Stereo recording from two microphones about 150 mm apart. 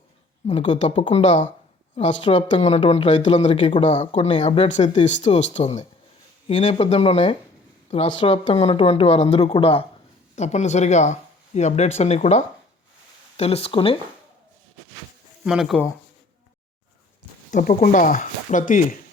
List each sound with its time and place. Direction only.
0.4 s speech: 45° left (ahead or behind)
10.3 s speech: 50° left (ahead or behind)
15.4 s speech: 5° right (ahead or behind)
17.5 s speech: 60° left (ahead or behind)